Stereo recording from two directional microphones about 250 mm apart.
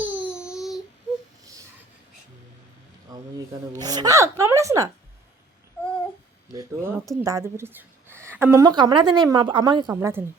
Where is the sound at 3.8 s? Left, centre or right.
Centre.